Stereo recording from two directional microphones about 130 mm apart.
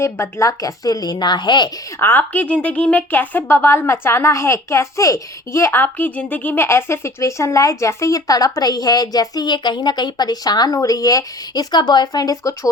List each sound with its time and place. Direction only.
0.0 s speech: 20° left (ahead or behind)
2.0 s speech: 15° left (ahead or behind)